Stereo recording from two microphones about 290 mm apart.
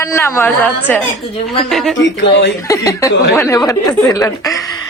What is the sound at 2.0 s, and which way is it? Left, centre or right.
Speech, left.